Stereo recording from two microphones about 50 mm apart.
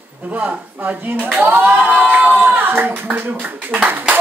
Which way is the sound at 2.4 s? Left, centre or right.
Right.